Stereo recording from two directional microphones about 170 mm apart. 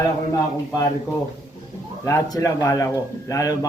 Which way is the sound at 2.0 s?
20° left (ahead or behind).